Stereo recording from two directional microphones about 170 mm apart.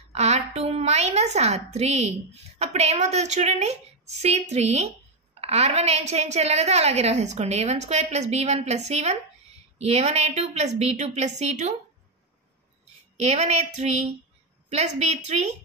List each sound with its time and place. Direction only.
0.1 s a woman's voice: 40° right (ahead or behind)
13.2 s a woman's voice: 40° right (ahead or behind)